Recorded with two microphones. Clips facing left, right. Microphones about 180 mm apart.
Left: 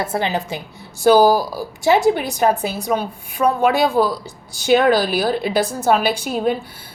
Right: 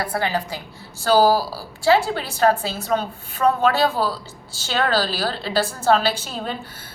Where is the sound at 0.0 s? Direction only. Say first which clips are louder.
Left 2 dB; 25° left (ahead or behind).